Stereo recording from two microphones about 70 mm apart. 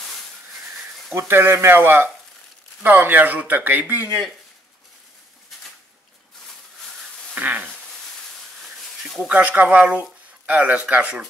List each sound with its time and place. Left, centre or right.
1.1 s speech: right
7.3 s a sound: right
9.3 s speech: centre